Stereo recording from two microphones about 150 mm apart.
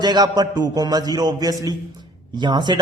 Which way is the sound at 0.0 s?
25° right (ahead or behind).